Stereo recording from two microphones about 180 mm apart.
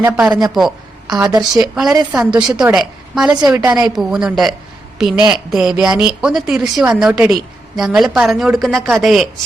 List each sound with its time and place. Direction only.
0.0 s a man's voice: 5° right (ahead or behind)
0.5 s a sound: centre (ahead or behind)
1.1 s a woman's voice: 20° right (ahead or behind)
1.5 s a woman's voice: 5° right (ahead or behind)